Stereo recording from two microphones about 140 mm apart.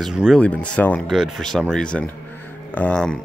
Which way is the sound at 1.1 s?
Centre (ahead or behind).